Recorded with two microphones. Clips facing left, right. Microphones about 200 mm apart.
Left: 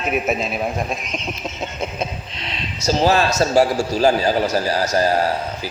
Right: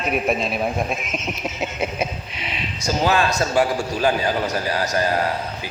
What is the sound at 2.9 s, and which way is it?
Speech, 30° left (ahead or behind).